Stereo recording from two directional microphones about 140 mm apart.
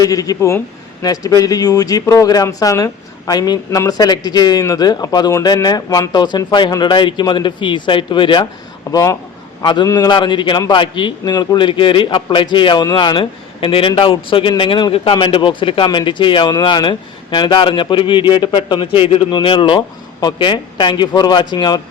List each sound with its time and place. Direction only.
0.0 s speech: 25° left (ahead or behind)